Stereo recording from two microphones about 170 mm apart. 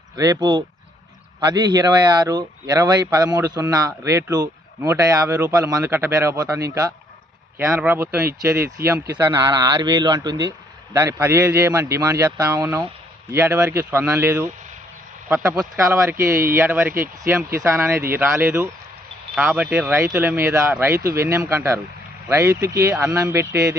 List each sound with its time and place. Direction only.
0.2 s speech: 20° right (ahead or behind)
16.3 s speech: 60° right (ahead or behind)
16.6 s speech: 10° right (ahead or behind)